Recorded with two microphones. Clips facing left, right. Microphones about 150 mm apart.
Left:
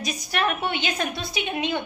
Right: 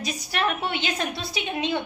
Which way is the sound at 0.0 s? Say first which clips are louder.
Left 1 dB; 30° right (ahead or behind).